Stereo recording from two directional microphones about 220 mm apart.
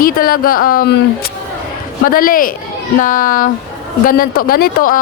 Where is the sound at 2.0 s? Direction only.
40° left (ahead or behind).